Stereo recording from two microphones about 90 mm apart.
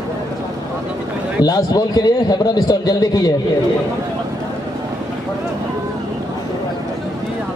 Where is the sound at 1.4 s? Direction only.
45° left (ahead or behind).